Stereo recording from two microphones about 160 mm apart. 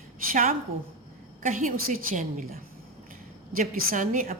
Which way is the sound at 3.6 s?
55° right (ahead or behind).